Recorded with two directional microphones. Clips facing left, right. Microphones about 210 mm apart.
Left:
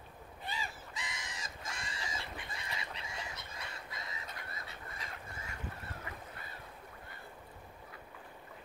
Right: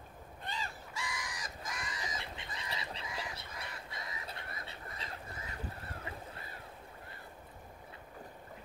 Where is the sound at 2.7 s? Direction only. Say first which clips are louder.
Right 4 dB; 30° right (ahead or behind).